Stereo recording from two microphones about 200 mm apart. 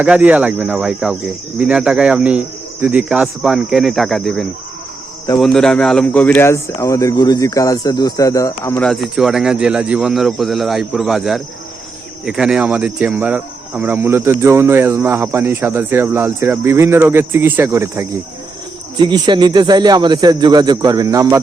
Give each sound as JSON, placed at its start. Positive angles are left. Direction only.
{"t": 0.0, "sound": "speech", "side_deg": -5}
{"t": 8.8, "sound": "speech", "side_deg": 0}